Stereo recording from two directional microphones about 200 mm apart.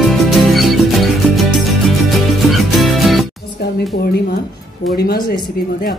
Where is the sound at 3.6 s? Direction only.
50° left (ahead or behind).